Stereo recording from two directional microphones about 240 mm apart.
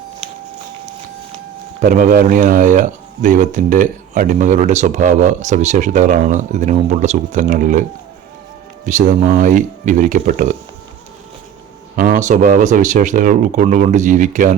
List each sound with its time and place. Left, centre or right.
1.8 s speech: right
8.9 s speech: right
11.9 s speech: right